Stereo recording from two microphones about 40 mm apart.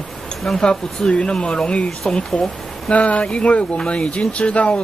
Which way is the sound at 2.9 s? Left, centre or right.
Left.